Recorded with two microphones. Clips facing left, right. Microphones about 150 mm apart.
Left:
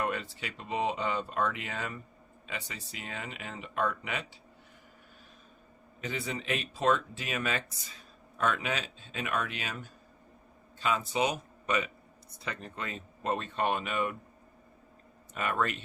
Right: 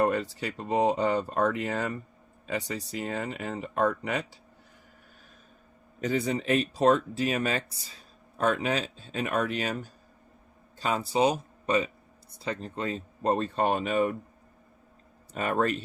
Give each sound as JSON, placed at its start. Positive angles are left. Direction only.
{"t": 0.0, "sound": "speech", "side_deg": -40}
{"t": 6.0, "sound": "speech", "side_deg": -40}
{"t": 15.3, "sound": "speech", "side_deg": -35}